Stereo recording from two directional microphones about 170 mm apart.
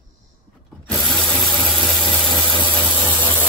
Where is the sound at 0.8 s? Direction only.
Centre (ahead or behind).